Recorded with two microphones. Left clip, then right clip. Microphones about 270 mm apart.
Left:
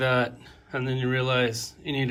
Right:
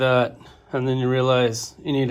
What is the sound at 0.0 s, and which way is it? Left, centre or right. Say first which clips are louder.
Speech: right 5 dB; centre.